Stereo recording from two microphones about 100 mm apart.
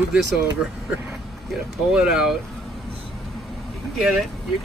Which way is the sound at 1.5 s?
5° right (ahead or behind).